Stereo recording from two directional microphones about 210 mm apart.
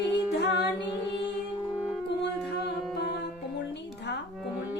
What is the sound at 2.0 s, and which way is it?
Music, 55° left (ahead or behind).